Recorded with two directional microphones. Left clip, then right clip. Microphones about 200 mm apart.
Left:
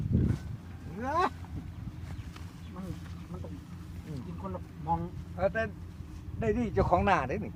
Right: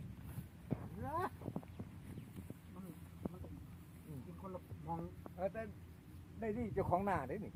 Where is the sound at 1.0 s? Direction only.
10° right (ahead or behind).